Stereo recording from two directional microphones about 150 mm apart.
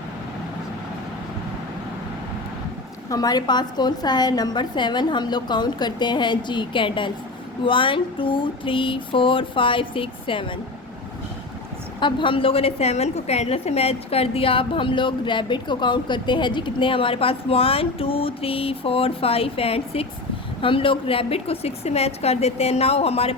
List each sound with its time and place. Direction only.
3.1 s a woman's voice: 25° left (ahead or behind)
11.9 s a woman's voice: 35° left (ahead or behind)